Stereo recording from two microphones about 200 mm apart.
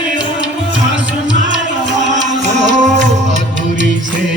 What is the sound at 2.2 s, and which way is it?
Music, 35° right (ahead or behind).